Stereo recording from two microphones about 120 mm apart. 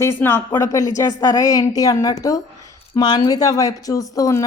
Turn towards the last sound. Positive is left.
turn(degrees=30)  # may be behind; listen again after turning